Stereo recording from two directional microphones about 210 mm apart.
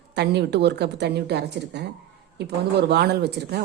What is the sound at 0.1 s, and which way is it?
A woman's voice, 55° right (ahead or behind).